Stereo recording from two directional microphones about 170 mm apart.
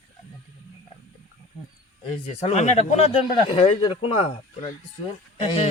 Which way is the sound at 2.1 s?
35° left (ahead or behind).